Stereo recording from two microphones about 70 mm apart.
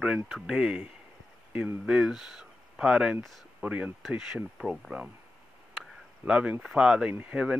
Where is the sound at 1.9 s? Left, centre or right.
Centre.